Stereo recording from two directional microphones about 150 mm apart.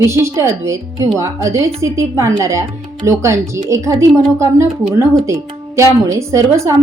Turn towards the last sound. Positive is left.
turn(degrees=-20)  # may be behind; listen again after turning